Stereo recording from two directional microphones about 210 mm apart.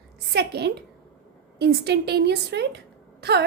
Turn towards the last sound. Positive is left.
turn(degrees=-50)  # may be behind; listen again after turning